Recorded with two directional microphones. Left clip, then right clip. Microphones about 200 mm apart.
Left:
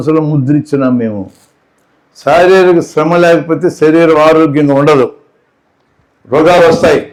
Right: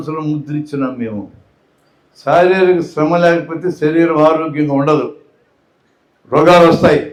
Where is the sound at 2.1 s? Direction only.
35° left (ahead or behind).